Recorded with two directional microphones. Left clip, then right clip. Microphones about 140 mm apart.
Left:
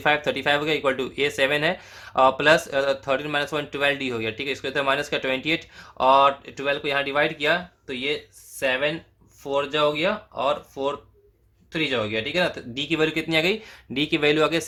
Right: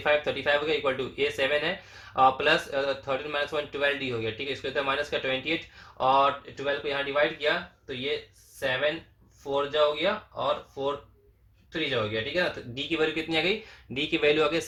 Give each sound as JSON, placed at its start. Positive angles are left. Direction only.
{"t": 0.0, "sound": "speech", "side_deg": 45}
{"t": 9.5, "sound": "speech", "side_deg": 70}